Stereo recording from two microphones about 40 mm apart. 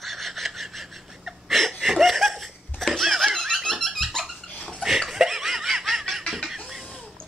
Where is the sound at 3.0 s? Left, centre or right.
Centre.